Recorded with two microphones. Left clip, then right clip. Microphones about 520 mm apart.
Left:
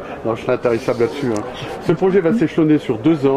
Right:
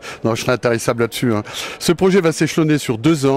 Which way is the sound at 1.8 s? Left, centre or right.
Right.